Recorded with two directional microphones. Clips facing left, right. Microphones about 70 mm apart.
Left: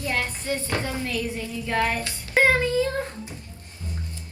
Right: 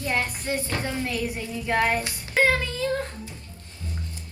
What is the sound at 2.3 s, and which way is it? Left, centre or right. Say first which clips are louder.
A child's voice: left 3 dB; left.